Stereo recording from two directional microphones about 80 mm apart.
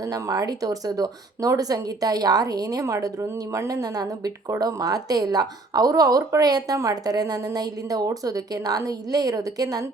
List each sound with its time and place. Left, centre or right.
0.1 s speech: right